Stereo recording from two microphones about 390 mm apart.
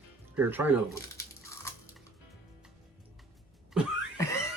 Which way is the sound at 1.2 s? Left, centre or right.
Centre.